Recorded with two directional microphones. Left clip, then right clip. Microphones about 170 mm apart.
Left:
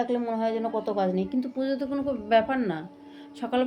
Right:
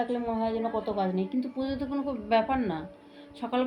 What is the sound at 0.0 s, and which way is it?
A woman's voice, 30° left (ahead or behind).